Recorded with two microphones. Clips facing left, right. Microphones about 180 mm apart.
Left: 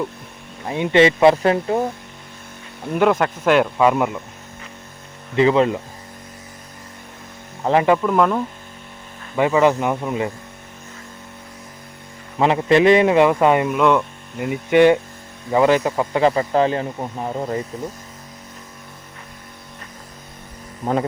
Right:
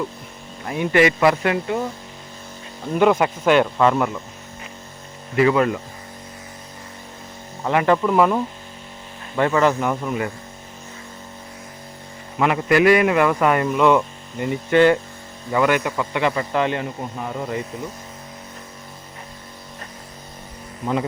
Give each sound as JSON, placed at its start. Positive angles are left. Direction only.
{"t": 0.7, "sound": "speech", "side_deg": 25}
{"t": 2.9, "sound": "speech", "side_deg": 0}
{"t": 5.4, "sound": "speech", "side_deg": 25}
{"t": 7.6, "sound": "speech", "side_deg": 30}
{"t": 8.0, "sound": "speech", "side_deg": -5}
{"t": 9.3, "sound": "speech", "side_deg": 15}
{"t": 12.4, "sound": "speech", "side_deg": 25}
{"t": 13.7, "sound": "speech", "side_deg": 0}
{"t": 14.7, "sound": "speech", "side_deg": 15}
{"t": 15.5, "sound": "speech", "side_deg": 30}